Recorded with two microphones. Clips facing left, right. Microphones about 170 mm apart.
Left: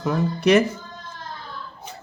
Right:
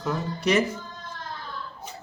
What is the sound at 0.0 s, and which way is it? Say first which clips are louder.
Speech: left 6 dB; 60° left (ahead or behind).